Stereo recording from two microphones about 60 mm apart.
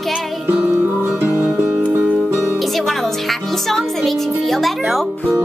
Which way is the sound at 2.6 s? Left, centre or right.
Centre.